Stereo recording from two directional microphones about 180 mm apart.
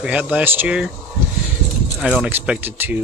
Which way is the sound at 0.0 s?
5° right (ahead or behind).